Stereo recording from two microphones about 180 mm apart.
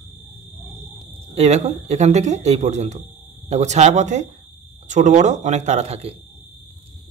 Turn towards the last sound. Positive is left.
turn(degrees=-35)  # may be behind; listen again after turning